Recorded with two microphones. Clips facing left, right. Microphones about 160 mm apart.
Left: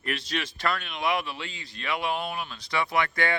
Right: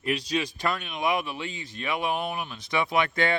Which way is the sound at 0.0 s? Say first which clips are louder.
Right 4 dB; 15° right (ahead or behind).